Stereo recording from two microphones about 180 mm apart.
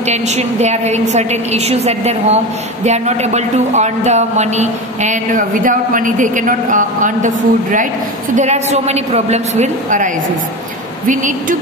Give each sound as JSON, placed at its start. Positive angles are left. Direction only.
{"t": 0.0, "sound": "a woman's voice", "side_deg": -40}